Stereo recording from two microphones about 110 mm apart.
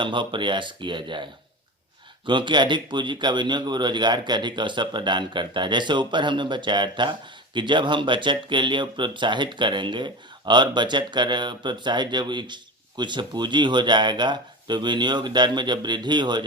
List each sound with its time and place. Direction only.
0.0 s speech: 50° right (ahead or behind)